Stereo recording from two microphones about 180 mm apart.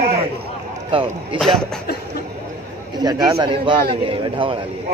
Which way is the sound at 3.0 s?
20° right (ahead or behind).